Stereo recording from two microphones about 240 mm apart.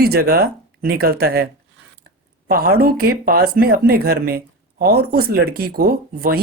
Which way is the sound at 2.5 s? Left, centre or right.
Right.